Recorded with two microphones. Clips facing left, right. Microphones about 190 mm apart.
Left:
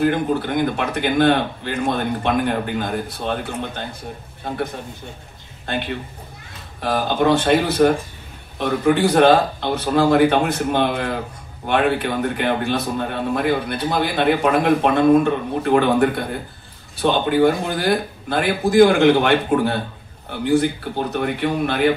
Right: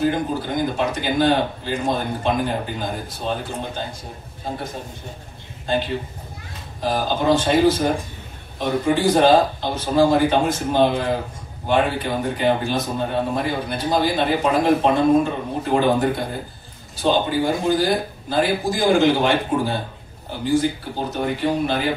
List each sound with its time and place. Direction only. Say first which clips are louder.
0.0 s a man's voice: left 3 dB; 60° left (ahead or behind)
6.8 s a man's voice: left 3 dB; 60° left (ahead or behind)